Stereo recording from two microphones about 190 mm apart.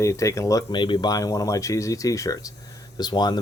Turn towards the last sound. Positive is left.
turn(degrees=20)  # may be behind; listen again after turning